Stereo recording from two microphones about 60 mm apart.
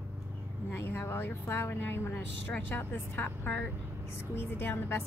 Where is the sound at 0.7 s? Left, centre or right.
Left.